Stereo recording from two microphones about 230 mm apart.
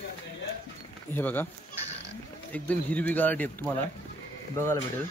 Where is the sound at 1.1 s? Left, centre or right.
Centre.